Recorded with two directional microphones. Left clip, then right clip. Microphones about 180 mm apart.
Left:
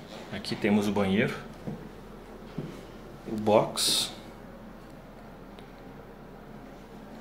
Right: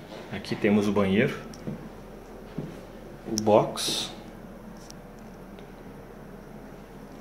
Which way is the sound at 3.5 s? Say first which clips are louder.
Right 2 dB; 10° right (ahead or behind).